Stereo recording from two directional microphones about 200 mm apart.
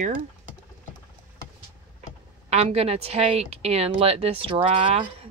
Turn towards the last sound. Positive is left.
turn(degrees=-30)  # may be behind; listen again after turning